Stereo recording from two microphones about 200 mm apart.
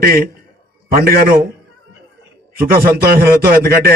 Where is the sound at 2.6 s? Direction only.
45° right (ahead or behind).